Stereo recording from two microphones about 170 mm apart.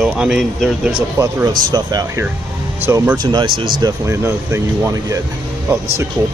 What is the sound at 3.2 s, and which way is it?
Speech, 25° right (ahead or behind).